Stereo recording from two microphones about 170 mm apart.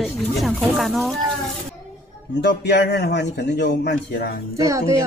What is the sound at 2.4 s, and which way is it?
A man's voice, 85° left.